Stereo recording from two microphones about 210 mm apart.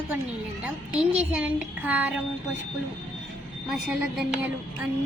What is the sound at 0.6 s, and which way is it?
Speech, 5° right (ahead or behind).